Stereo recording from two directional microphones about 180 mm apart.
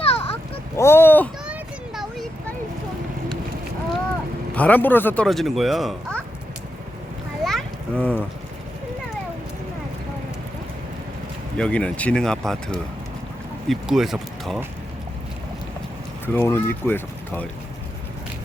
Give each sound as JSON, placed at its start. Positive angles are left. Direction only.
{"t": 0.0, "sound": "a sound", "side_deg": 30}
{"t": 0.8, "sound": "speech", "side_deg": 15}
{"t": 4.5, "sound": "speech", "side_deg": 10}
{"t": 7.4, "sound": "a sound", "side_deg": 5}
{"t": 11.5, "sound": "speech", "side_deg": 5}
{"t": 16.2, "sound": "speech", "side_deg": 10}